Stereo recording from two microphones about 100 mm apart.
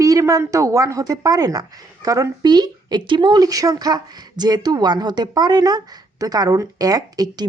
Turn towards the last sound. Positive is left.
turn(degrees=-40)  # may be behind; listen again after turning